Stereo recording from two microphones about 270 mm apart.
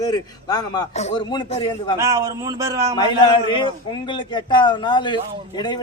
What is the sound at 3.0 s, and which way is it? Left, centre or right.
A man's voice, centre.